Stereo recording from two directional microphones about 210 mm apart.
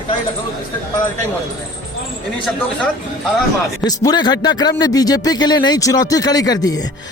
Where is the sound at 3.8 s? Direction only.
20° left (ahead or behind).